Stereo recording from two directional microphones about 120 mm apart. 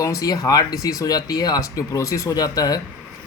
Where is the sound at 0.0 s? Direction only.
30° left (ahead or behind).